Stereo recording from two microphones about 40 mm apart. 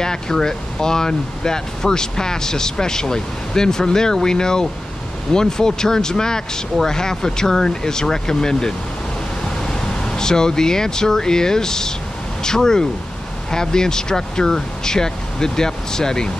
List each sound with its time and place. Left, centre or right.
0.0 s speech: centre